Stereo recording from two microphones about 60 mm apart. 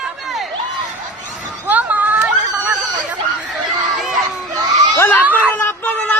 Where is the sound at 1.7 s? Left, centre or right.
Right.